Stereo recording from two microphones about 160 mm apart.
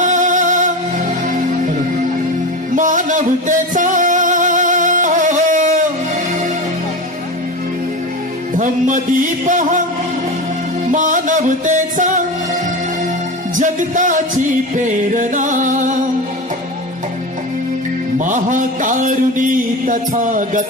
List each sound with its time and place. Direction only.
0.0 s music: 50° right (ahead or behind)
2.7 s music: 55° right (ahead or behind)
8.5 s music: 50° right (ahead or behind)
10.9 s music: 55° right (ahead or behind)
13.6 s music: 55° right (ahead or behind)
18.1 s music: 55° right (ahead or behind)